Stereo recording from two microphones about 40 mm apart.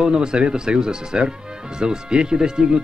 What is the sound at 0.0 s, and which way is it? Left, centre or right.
Speech, centre.